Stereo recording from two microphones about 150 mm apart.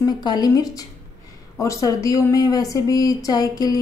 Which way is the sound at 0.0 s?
25° left (ahead or behind).